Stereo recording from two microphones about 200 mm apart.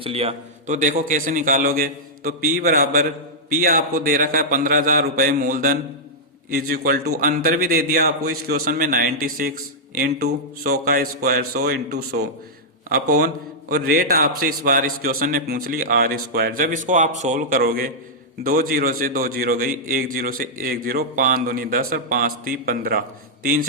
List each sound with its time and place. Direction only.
0.0 s a man's voice: 30° right (ahead or behind); by 23.6 s 45° right (ahead or behind)